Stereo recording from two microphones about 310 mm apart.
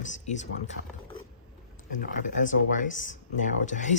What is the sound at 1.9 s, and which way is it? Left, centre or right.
Speech, left.